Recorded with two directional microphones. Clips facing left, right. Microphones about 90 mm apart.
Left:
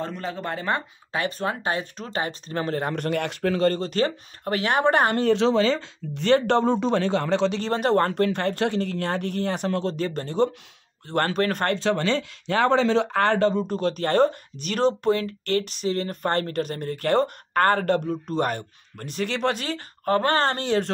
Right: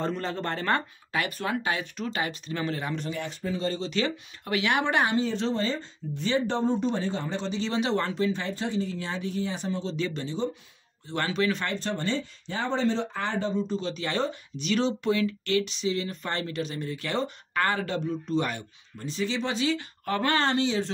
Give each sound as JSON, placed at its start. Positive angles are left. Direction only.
{"t": 0.0, "sound": "speech", "side_deg": 5}
{"t": 1.1, "sound": "speech", "side_deg": 30}
{"t": 7.6, "sound": "speech", "side_deg": 50}
{"t": 9.9, "sound": "speech", "side_deg": 45}